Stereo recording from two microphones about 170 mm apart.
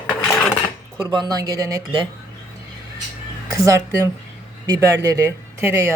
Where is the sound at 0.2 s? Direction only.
Centre (ahead or behind).